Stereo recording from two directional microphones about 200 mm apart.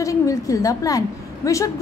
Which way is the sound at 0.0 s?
15° left (ahead or behind).